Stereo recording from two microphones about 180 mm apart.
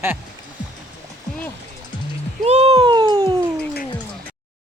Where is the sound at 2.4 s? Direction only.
35° right (ahead or behind).